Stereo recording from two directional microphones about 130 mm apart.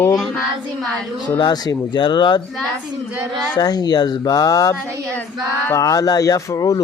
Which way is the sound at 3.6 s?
30° left (ahead or behind).